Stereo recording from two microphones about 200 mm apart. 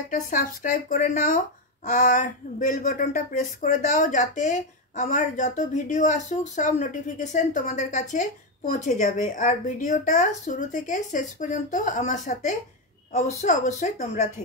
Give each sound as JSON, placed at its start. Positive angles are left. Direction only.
{"t": 0.1, "sound": "speech", "side_deg": 45}